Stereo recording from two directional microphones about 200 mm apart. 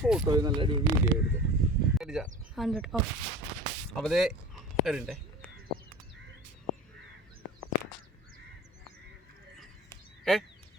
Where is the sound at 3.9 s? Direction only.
Centre (ahead or behind).